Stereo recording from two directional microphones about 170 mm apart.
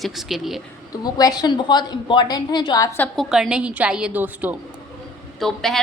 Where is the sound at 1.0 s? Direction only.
20° left (ahead or behind).